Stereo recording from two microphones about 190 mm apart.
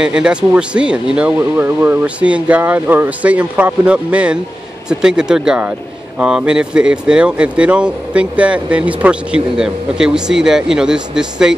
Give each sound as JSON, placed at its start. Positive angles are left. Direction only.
{"t": 0.0, "sound": "speech", "side_deg": -5}